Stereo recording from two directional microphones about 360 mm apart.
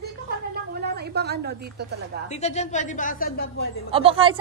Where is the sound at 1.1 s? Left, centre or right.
Right.